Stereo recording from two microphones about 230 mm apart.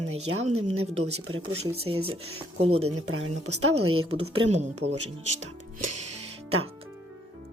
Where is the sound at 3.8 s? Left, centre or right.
Right.